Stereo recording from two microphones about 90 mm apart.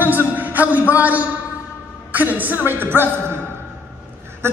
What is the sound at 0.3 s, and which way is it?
A man's voice, 20° right (ahead or behind).